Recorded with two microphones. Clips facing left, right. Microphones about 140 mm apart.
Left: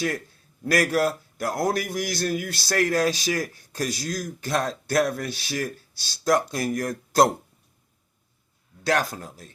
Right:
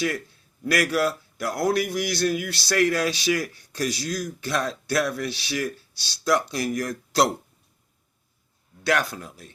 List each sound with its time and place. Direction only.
0.6 s a man's voice: 45° left (ahead or behind)
8.8 s speech: 40° left (ahead or behind)